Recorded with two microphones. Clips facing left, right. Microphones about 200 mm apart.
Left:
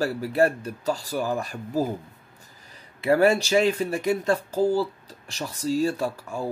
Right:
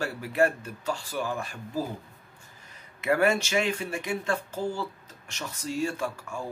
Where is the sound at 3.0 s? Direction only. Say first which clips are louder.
Left 5 dB; 35° left (ahead or behind).